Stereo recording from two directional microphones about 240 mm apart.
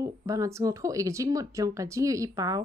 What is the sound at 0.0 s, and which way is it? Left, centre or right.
Speech, centre.